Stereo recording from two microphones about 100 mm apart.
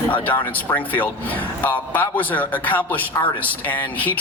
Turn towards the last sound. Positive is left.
turn(degrees=15)  # may be behind; listen again after turning